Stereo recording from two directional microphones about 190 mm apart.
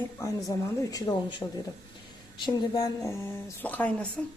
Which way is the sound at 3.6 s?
10° left (ahead or behind).